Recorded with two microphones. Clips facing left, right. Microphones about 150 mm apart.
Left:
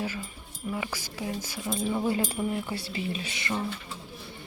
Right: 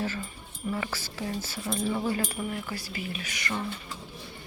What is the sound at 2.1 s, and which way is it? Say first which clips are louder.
Speech: left 3 dB; 25° left (ahead or behind).